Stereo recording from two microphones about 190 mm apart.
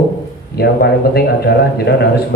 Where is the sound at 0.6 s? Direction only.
55° left (ahead or behind).